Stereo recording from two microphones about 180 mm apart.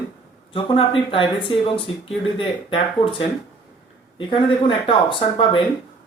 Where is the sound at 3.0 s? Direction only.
30° left (ahead or behind).